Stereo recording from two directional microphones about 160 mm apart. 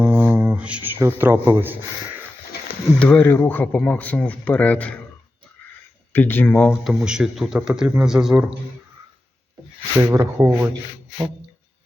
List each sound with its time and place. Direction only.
0.0 s a sound: 10° right (ahead or behind)
3.0 s speech: 10° left (ahead or behind)
6.1 s speech: 10° left (ahead or behind)
6.8 s speech: 5° right (ahead or behind)
10.0 s speech: 20° right (ahead or behind)